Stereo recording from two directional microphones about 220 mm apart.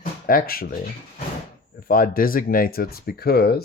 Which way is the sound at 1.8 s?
40° left (ahead or behind).